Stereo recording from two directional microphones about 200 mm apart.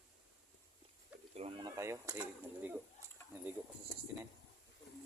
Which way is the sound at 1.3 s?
30° right (ahead or behind).